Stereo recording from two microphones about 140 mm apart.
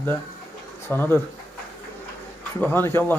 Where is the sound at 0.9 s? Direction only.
15° left (ahead or behind).